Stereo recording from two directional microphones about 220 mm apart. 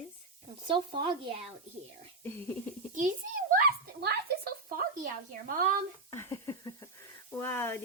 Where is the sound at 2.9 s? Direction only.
35° right (ahead or behind).